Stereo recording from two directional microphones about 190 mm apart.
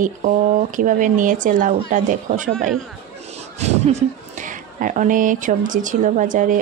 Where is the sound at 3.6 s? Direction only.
35° right (ahead or behind).